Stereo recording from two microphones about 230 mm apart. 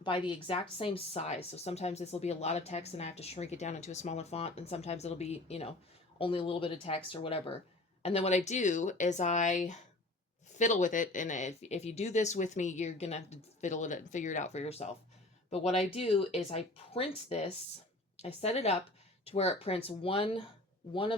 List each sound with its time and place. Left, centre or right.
0.0 s speech: left